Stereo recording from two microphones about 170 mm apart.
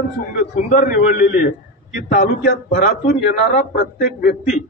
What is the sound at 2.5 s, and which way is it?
Speech, 70° left (ahead or behind).